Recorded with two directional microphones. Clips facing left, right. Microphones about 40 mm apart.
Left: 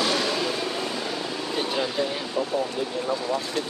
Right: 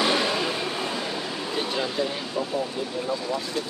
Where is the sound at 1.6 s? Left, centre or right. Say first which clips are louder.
Left 1 dB; centre.